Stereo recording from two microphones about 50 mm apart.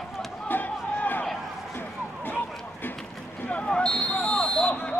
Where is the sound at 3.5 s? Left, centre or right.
Left.